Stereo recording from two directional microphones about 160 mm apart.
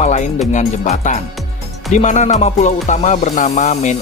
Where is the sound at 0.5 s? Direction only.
45° left (ahead or behind).